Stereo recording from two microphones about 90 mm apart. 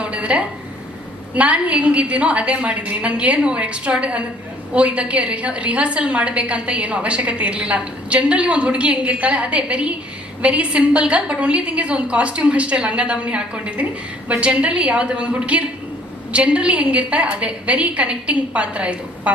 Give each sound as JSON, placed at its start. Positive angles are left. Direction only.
{"t": 0.0, "sound": "a woman's voice", "side_deg": -15}